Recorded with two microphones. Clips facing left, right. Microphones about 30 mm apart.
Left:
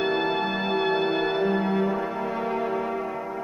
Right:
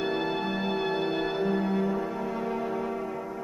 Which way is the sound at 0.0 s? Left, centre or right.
Centre.